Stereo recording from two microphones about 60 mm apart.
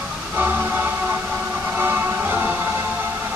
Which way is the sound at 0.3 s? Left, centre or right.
Right.